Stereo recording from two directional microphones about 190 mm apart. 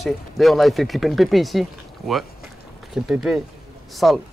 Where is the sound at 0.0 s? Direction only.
Centre (ahead or behind).